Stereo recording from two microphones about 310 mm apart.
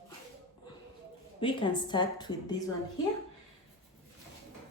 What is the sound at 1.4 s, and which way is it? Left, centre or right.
Speech, centre.